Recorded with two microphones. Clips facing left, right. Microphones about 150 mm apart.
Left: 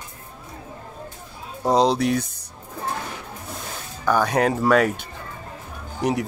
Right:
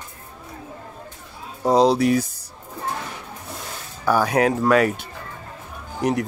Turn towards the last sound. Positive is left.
turn(degrees=0)  # may be behind; listen again after turning